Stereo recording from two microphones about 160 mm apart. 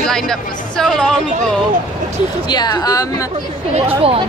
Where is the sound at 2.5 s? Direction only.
25° left (ahead or behind).